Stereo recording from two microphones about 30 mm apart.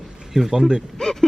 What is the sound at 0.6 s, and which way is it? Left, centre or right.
Speech, right.